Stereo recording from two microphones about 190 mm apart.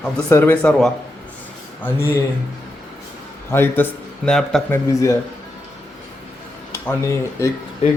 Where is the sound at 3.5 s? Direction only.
10° left (ahead or behind).